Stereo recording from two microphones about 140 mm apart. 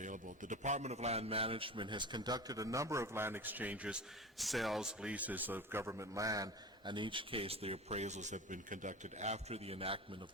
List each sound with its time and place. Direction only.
0.0 s a man's voice: 65° right (ahead or behind); by 10.0 s 45° right (ahead or behind)